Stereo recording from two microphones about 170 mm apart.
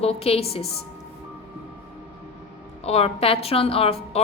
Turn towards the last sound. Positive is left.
turn(degrees=35)  # may be behind; listen again after turning